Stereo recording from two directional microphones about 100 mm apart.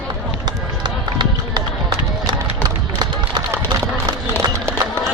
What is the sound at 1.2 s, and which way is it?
Run, 45° right (ahead or behind).